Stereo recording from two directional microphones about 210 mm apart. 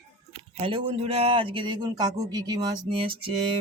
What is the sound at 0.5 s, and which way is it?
Speech, 25° right (ahead or behind).